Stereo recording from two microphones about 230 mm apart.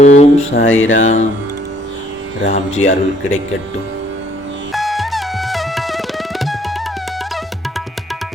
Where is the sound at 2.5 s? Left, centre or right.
Left.